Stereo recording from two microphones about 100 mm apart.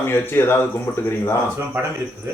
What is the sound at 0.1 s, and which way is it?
Speech, 25° left (ahead or behind).